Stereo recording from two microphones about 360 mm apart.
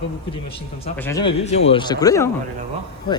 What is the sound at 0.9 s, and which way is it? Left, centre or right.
Speech, centre.